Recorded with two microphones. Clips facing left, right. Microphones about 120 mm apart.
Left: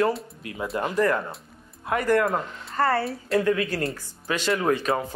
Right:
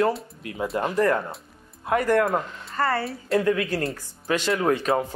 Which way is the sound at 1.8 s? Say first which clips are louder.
Right 1 dB; 30° right (ahead or behind).